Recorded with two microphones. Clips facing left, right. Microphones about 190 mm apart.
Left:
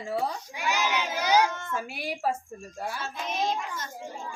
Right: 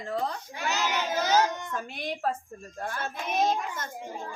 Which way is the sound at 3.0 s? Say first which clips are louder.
Right 5 dB; 55° right (ahead or behind).